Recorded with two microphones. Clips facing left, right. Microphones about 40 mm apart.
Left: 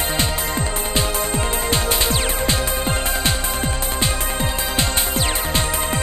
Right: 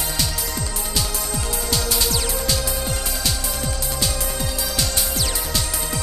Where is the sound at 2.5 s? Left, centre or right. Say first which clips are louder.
Left 3 dB; left.